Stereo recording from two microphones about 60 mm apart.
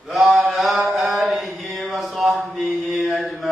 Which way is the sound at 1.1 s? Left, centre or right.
Centre.